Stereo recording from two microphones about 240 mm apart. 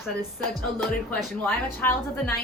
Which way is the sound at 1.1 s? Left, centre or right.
Centre.